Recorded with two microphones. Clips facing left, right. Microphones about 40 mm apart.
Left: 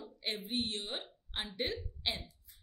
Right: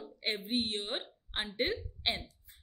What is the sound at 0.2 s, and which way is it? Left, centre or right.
A woman's voice, right.